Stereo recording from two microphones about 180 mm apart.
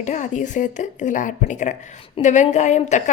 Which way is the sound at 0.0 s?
40° left (ahead or behind).